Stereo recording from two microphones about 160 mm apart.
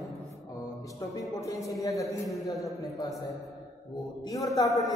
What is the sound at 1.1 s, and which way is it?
A man's voice, 20° left (ahead or behind).